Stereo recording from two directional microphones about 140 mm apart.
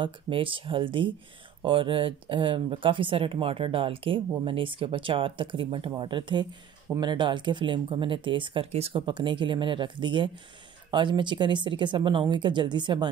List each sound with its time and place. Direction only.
0.0 s speech: 40° right (ahead or behind)